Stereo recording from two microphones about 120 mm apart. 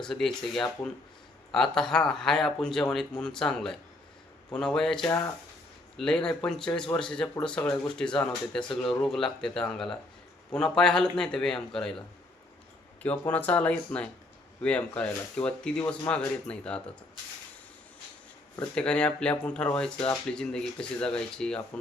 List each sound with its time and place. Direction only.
0.0 s a man's voice: 5° left (ahead or behind)
18.7 s speech: 10° left (ahead or behind)